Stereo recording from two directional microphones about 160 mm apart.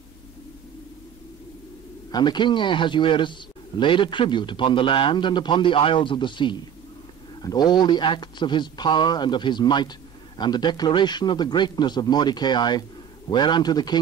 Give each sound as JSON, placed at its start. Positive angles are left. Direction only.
{"t": 2.0, "sound": "a man's voice", "side_deg": 25}